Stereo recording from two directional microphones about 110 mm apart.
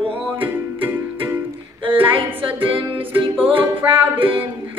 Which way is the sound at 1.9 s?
55° right (ahead or behind).